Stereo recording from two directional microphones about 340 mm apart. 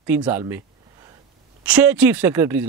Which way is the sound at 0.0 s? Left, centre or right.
Centre.